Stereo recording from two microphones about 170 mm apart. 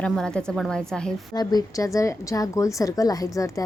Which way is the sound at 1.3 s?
25° left (ahead or behind).